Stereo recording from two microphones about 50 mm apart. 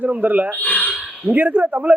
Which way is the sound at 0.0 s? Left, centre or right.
Right.